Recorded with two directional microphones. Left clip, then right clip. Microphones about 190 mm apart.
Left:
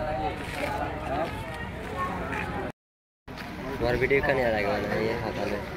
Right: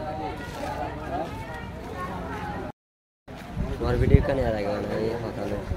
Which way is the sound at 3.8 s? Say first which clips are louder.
Left 1 dB; 60° right (ahead or behind).